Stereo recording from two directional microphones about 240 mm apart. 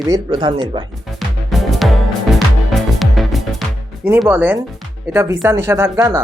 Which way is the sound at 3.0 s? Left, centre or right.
Centre.